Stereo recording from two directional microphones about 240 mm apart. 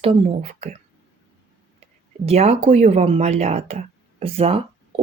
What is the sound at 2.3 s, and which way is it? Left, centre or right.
Speech, right.